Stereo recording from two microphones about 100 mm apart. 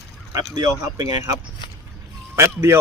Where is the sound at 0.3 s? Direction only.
40° right (ahead or behind).